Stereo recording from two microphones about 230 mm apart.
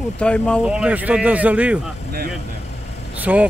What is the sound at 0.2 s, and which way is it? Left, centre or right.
Speech, centre.